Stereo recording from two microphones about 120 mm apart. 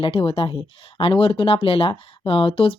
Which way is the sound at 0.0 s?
50° left (ahead or behind).